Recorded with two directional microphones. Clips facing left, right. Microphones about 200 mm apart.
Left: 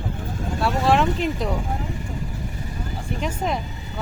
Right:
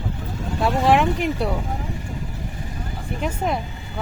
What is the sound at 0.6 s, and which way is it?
Speech, 15° right (ahead or behind).